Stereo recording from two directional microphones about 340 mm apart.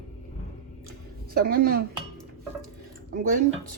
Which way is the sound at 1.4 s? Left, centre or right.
Right.